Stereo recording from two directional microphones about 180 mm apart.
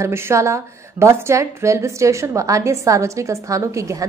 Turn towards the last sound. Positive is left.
turn(degrees=-15)  # may be behind; listen again after turning